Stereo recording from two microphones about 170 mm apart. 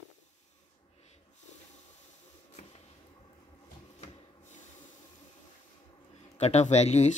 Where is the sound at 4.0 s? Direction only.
45° left (ahead or behind).